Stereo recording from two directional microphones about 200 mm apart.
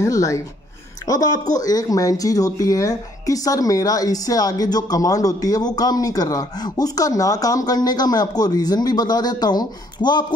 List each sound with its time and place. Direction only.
0.0 s speech: 15° left (ahead or behind)